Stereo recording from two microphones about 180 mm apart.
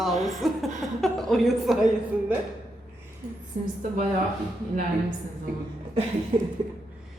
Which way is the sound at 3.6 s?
45° right (ahead or behind).